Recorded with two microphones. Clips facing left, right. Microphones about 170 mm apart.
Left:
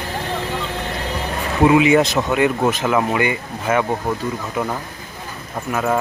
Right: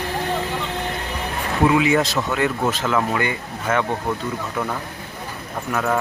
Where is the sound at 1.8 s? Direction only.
20° left (ahead or behind).